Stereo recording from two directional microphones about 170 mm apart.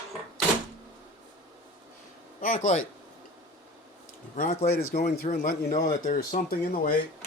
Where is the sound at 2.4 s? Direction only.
50° left (ahead or behind).